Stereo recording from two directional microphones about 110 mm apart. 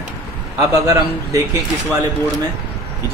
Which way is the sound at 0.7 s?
30° right (ahead or behind).